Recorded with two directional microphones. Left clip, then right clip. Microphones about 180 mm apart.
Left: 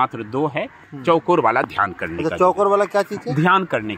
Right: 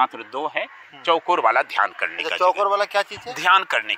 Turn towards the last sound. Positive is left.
turn(degrees=-55)  # may be behind; listen again after turning